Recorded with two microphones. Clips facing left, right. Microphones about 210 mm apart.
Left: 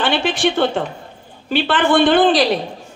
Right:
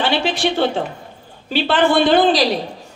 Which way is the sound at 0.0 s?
50° left (ahead or behind).